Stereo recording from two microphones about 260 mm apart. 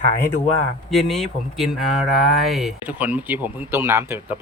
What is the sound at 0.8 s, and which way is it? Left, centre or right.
Speech, centre.